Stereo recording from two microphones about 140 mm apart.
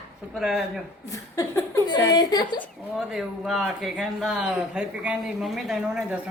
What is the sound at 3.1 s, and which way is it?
Speech, 5° right (ahead or behind).